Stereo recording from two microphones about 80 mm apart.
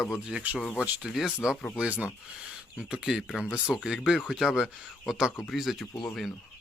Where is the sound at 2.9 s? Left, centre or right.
Centre.